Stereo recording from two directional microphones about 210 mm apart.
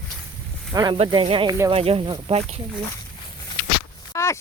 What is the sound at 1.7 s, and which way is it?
Speech, 25° right (ahead or behind).